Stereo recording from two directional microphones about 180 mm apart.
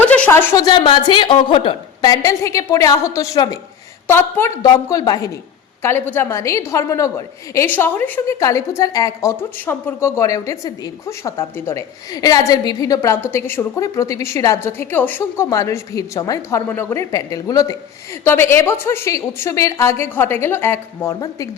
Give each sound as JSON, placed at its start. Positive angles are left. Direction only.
{"t": 0.1, "sound": "a woman's voice", "side_deg": 10}